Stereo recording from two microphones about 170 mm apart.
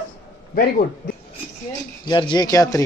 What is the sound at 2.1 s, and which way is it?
Speech, 25° left (ahead or behind).